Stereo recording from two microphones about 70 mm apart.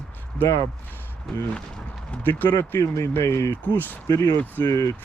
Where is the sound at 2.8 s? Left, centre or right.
Left.